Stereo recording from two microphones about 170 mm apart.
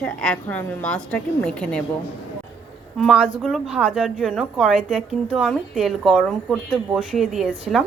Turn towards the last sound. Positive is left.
turn(degrees=0)  # may be behind; listen again after turning